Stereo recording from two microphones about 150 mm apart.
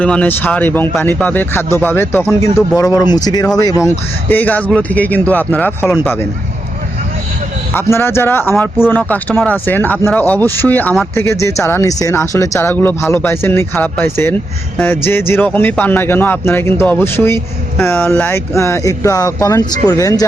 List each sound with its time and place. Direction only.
0.0 s speech: 10° left (ahead or behind)
7.7 s speech: 15° left (ahead or behind)